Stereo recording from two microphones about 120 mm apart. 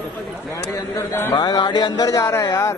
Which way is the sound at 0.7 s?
25° left (ahead or behind).